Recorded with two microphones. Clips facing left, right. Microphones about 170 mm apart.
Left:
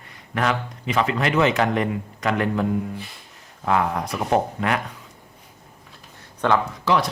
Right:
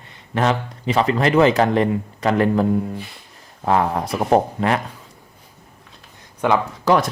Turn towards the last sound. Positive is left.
turn(degrees=-45)  # may be behind; listen again after turning